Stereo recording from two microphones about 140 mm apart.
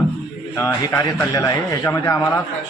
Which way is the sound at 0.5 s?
20° left (ahead or behind).